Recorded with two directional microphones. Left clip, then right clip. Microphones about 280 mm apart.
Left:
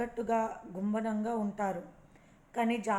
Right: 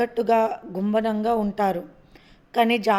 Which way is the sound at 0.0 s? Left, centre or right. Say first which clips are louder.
Right 12 dB; right.